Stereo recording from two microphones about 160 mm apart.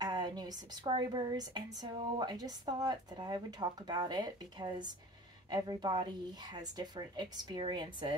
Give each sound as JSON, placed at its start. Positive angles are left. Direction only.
{"t": 0.0, "sound": "a woman's voice", "side_deg": -25}